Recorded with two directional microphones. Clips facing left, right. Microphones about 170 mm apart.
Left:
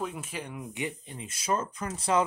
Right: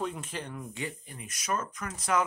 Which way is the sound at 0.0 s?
5° left (ahead or behind).